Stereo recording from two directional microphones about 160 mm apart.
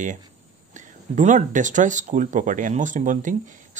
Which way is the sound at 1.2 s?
50° right (ahead or behind).